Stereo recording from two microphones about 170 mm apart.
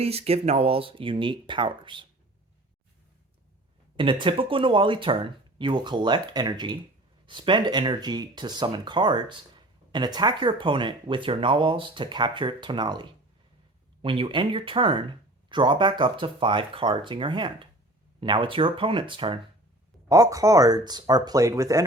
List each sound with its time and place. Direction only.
0.0 s speech: 35° right (ahead or behind)
3.9 s speech: 30° right (ahead or behind)
20.1 s speech: 20° right (ahead or behind)